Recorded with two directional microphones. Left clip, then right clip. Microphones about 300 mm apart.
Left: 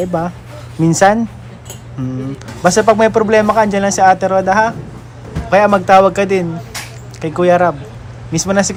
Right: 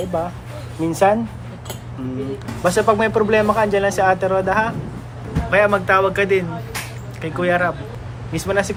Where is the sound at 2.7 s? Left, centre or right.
Left.